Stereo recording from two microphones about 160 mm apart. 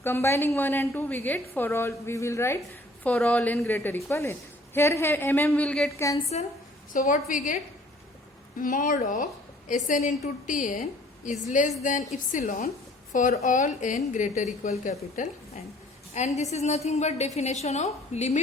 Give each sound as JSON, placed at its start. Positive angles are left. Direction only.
{"t": 0.0, "sound": "a woman's voice", "side_deg": 15}
{"t": 5.9, "sound": "a woman's voice", "side_deg": 20}
{"t": 6.9, "sound": "a woman's voice", "side_deg": 55}
{"t": 13.1, "sound": "a woman's voice", "side_deg": 50}